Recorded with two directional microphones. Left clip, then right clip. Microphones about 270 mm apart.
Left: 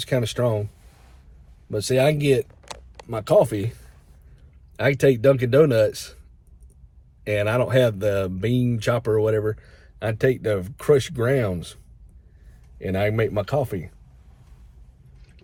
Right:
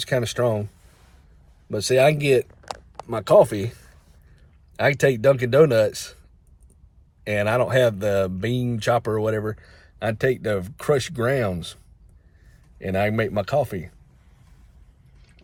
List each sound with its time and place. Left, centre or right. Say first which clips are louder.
0.0 s speech: right 1 dB; centre
1.7 s speech: right 2 dB; centre
4.8 s speech: even; centre
7.3 s speech: right 1 dB; centre
12.8 s speech: even; centre